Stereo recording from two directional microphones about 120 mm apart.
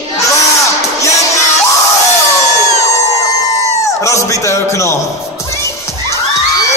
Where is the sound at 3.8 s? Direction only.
25° left (ahead or behind).